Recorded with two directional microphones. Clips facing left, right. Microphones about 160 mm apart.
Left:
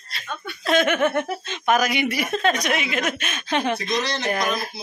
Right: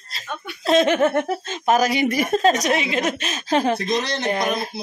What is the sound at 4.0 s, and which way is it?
Speech, 55° right (ahead or behind).